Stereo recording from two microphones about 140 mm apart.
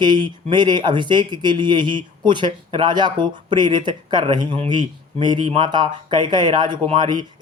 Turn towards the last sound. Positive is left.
turn(degrees=-30)  # may be behind; listen again after turning